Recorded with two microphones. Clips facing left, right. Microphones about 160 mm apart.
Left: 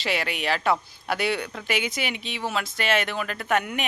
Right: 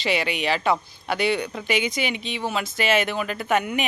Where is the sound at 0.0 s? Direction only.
Centre (ahead or behind).